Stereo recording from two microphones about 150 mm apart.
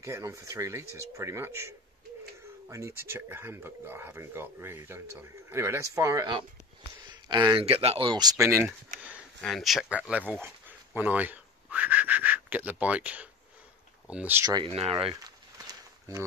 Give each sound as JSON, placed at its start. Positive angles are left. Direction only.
{"t": 0.0, "sound": "speech", "side_deg": -20}
{"t": 2.7, "sound": "speech", "side_deg": -20}
{"t": 9.4, "sound": "speech", "side_deg": 0}
{"t": 14.4, "sound": "speech", "side_deg": -25}
{"t": 14.7, "sound": "speech", "side_deg": -40}
{"t": 15.2, "sound": "a sound", "side_deg": -25}